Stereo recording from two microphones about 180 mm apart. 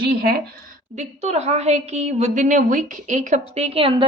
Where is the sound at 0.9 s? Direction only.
40° right (ahead or behind).